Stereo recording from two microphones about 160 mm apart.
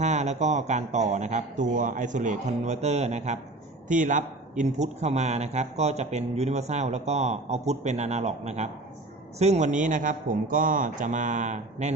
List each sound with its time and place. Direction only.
0.0 s a man's voice: 45° right (ahead or behind)